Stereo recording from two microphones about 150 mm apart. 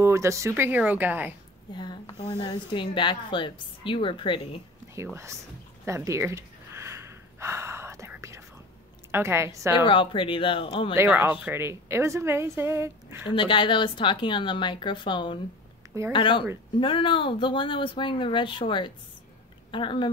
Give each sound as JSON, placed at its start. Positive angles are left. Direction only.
{"t": 0.0, "sound": "a woman's voice", "side_deg": -20}
{"t": 1.7, "sound": "a woman's voice", "side_deg": 30}
{"t": 4.9, "sound": "speech", "side_deg": -20}
{"t": 5.9, "sound": "gasp", "side_deg": -20}
{"t": 8.2, "sound": "whispering", "side_deg": -20}
{"t": 9.1, "sound": "a woman's voice", "side_deg": -15}
{"t": 9.8, "sound": "a woman's voice", "side_deg": 35}
{"t": 11.0, "sound": "a woman's voice", "side_deg": -10}
{"t": 13.3, "sound": "a woman's voice", "side_deg": 35}